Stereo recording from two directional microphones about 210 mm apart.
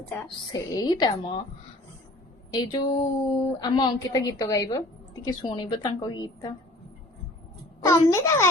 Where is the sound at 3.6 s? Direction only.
20° left (ahead or behind).